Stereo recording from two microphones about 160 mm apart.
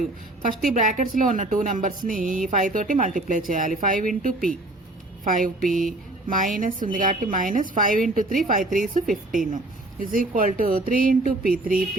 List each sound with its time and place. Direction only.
0.4 s a woman's voice: 60° right (ahead or behind)